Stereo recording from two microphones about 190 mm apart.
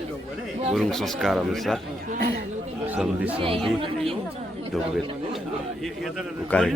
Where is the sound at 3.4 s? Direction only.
30° right (ahead or behind).